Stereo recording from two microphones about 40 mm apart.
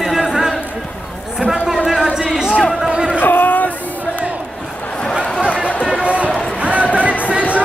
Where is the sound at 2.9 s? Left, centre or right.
Right.